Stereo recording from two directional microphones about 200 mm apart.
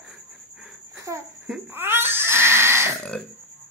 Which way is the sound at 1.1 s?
15° right (ahead or behind).